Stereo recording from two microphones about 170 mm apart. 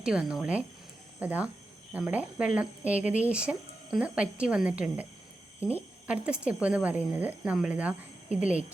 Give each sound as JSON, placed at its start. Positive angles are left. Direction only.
{"t": 0.0, "sound": "a woman's voice", "side_deg": -5}